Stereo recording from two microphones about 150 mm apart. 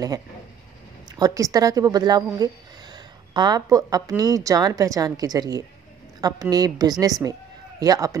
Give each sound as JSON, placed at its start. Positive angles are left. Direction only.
{"t": 1.1, "sound": "a woman's voice", "side_deg": -25}